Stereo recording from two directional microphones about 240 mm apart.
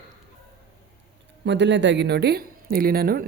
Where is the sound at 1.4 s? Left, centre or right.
Right.